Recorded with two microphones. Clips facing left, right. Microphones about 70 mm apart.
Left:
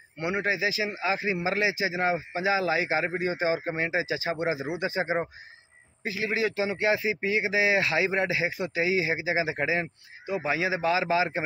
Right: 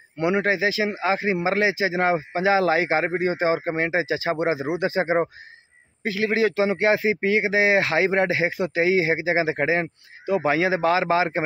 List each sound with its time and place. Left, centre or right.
0.2 s a man's voice: right
4.6 s a man's voice: right
10.2 s a man's voice: right